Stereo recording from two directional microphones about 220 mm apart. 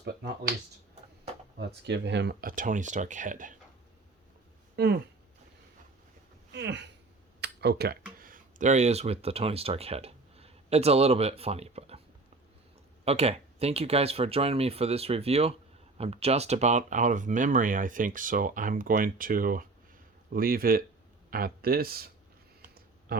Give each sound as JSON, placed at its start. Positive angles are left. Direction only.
{"t": 0.0, "sound": "speech", "side_deg": -50}
{"t": 1.5, "sound": "speech", "side_deg": -50}
{"t": 6.5, "sound": "speech", "side_deg": -50}
{"t": 13.1, "sound": "speech", "side_deg": -30}
{"t": 22.6, "sound": "a sound", "side_deg": -45}